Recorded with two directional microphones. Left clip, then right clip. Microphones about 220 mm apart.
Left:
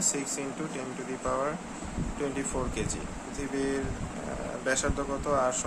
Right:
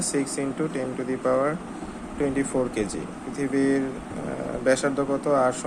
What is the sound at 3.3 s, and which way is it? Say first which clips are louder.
Speech: right 8 dB; 15° right (ahead or behind).